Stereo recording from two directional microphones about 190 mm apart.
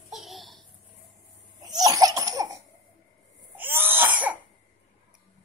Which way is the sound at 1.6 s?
20° right (ahead or behind).